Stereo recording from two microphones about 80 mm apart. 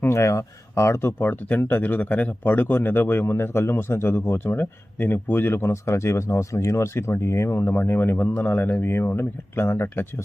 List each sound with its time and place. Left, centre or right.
0.0 s speech: left
1.2 s speech: left